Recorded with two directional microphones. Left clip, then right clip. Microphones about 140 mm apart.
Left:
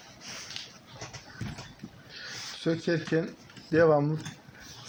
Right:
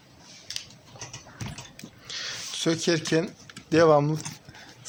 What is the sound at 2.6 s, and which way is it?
Speech, 45° right (ahead or behind).